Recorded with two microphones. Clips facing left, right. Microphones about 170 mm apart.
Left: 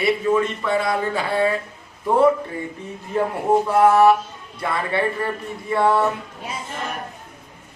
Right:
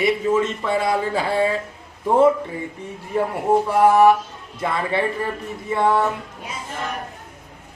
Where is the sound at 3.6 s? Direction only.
10° right (ahead or behind).